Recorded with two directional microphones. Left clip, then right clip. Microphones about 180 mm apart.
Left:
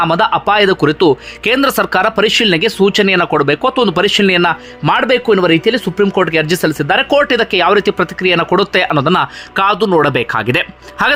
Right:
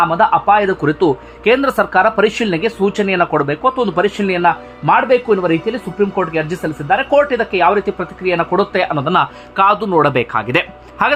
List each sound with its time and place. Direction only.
0.0 s speech: 25° left (ahead or behind)